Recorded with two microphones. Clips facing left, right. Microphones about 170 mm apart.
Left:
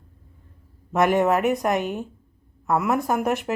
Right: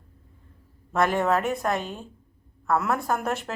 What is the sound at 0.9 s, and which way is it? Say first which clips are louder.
Speech: left 4 dB; 15° left (ahead or behind).